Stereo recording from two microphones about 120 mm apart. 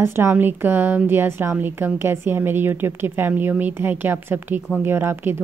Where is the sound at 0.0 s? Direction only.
20° right (ahead or behind).